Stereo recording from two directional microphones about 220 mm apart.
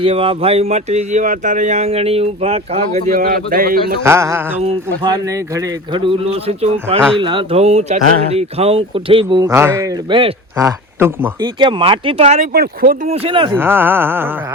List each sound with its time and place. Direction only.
0.0 s speech: 25° right (ahead or behind)
3.1 s a man's voice: 40° right (ahead or behind)
4.0 s a sound: 10° right (ahead or behind)
4.6 s speech: 20° right (ahead or behind)
12.5 s speech: 45° right (ahead or behind)
13.1 s speech: 25° right (ahead or behind)
13.5 s a sound: 10° right (ahead or behind)